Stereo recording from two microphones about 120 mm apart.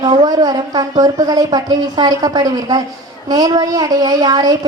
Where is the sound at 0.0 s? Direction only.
35° right (ahead or behind).